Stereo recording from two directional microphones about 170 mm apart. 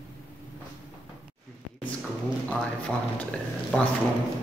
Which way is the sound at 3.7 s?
5° left (ahead or behind).